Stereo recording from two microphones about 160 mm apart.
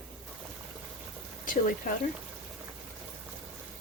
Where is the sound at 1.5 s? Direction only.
60° left (ahead or behind).